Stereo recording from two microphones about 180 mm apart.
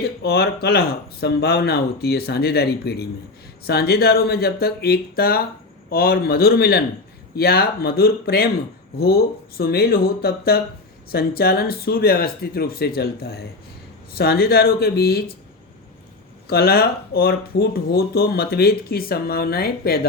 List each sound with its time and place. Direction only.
0.0 s speech: 60° left (ahead or behind)
16.5 s speech: 60° left (ahead or behind)